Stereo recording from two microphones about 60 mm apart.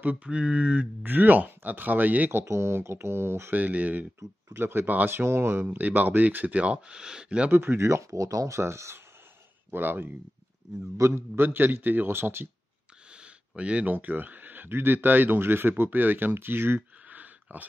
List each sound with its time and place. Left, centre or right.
0.0 s speech: right
2.4 s speech: right
3.5 s speech: right
4.6 s speech: right
5.2 s speech: right
5.7 s speech: right
7.5 s speech: right
9.7 s speech: right
11.0 s a man's voice: right
11.3 s speech: right
13.1 s speech: centre